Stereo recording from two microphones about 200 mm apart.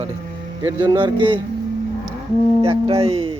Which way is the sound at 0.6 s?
20° right (ahead or behind).